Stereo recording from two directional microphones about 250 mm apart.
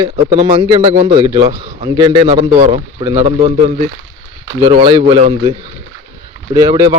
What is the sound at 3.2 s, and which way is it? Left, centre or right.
A man's voice, right.